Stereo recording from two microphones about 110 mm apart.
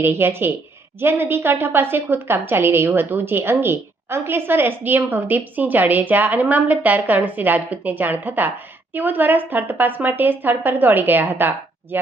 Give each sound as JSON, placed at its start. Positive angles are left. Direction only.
{"t": 0.0, "sound": "a woman's voice", "side_deg": -20}